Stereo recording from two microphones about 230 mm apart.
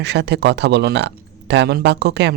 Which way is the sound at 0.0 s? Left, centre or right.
Right.